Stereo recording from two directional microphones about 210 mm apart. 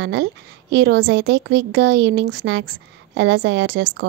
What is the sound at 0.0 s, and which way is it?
A woman's voice, 55° right (ahead or behind).